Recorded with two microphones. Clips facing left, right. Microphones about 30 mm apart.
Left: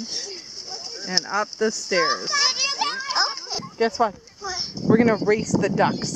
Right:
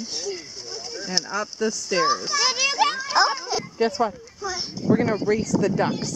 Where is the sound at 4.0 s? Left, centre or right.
Centre.